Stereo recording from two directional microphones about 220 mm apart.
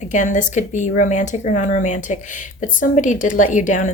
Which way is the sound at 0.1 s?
35° left (ahead or behind).